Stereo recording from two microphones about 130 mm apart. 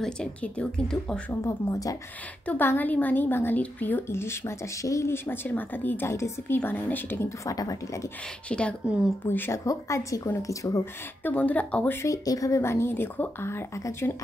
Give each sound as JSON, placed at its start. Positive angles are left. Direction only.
{"t": 0.0, "sound": "a woman's voice", "side_deg": 5}
{"t": 1.4, "sound": "speech", "side_deg": 25}
{"t": 2.4, "sound": "a woman's voice", "side_deg": 15}
{"t": 8.5, "sound": "a woman's voice", "side_deg": 10}
{"t": 9.3, "sound": "speech", "side_deg": 20}
{"t": 11.2, "sound": "a woman's voice", "side_deg": 10}
{"t": 12.0, "sound": "speech", "side_deg": 25}